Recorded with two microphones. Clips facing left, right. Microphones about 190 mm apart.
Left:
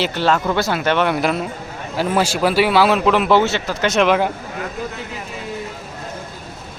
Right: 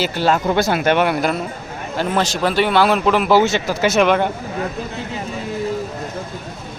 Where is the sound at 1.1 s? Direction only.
Centre (ahead or behind).